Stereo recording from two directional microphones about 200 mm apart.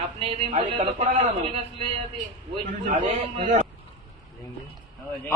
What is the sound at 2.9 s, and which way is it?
Speech, 35° right (ahead or behind).